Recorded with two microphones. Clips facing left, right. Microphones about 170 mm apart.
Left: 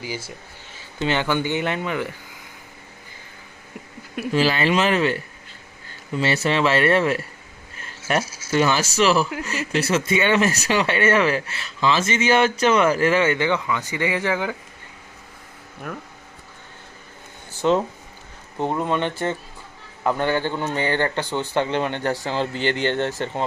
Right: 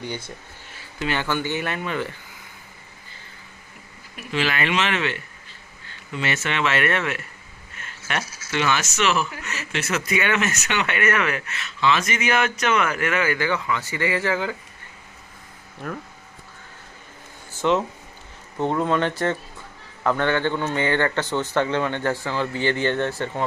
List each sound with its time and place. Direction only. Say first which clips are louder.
0.0 s speech: even; 5° left (ahead or behind)
0.9 s speech: left 3 dB; 25° left (ahead or behind)
4.3 s speech: left 4 dB; 35° left (ahead or behind)
8.2 s speech: left 4 dB; 10° left (ahead or behind)
8.4 s speech: left 3 dB; 35° left (ahead or behind); by 14.5 s 15° left (ahead or behind)
17.6 s speech: left 2 dB; 35° left (ahead or behind)
18.5 s a man's voice: right 1 dB; 15° left (ahead or behind)
20.7 s speech: left 1 dB; 35° left (ahead or behind)
22.1 s speech: left 1 dB; 35° left (ahead or behind)